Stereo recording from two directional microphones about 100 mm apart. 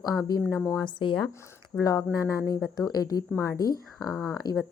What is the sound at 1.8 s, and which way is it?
A woman's voice, 40° left (ahead or behind).